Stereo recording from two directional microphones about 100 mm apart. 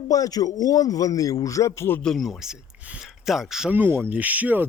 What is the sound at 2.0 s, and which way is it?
Speech, centre (ahead or behind).